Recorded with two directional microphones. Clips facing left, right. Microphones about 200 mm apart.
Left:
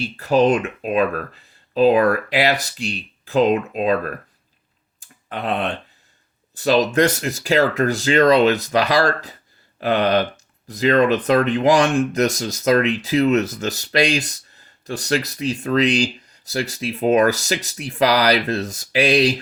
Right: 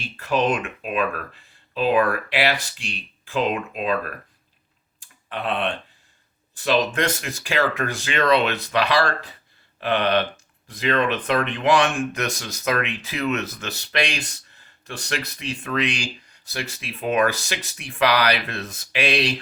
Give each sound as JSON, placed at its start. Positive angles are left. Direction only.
{"t": 0.0, "sound": "speech", "side_deg": 40}
{"t": 4.9, "sound": "tick", "side_deg": 40}
{"t": 6.6, "sound": "speech", "side_deg": 40}